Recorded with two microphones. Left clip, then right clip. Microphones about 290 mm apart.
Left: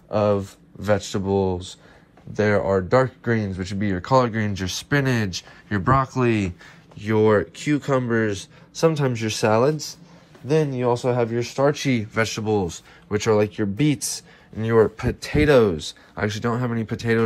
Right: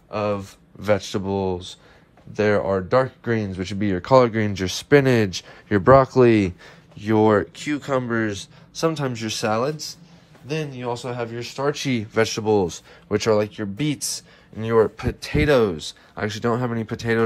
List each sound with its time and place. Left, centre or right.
0.1 s speech: centre
2.3 s a man's voice: right; by 10.8 s centre
10.8 s speech: centre